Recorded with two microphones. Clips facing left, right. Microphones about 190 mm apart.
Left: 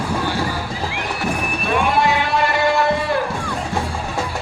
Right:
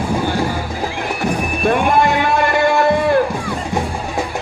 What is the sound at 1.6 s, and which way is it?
Music, 50° right (ahead or behind).